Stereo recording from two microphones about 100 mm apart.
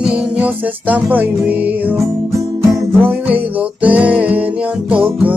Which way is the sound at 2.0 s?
30° right (ahead or behind).